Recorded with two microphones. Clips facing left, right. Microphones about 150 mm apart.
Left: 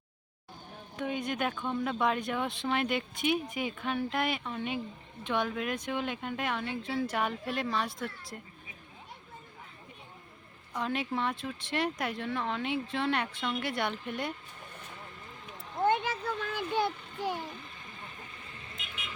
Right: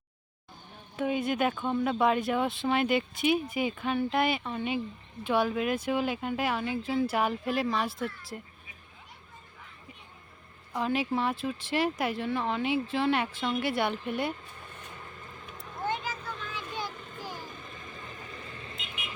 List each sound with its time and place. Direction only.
0.9 s speech: 5° right (ahead or behind)
10.8 s speech: 5° right (ahead or behind)
15.9 s a sound: 55° left (ahead or behind)
17.2 s a child's voice: 65° left (ahead or behind)
18.8 s vehicle: 25° right (ahead or behind)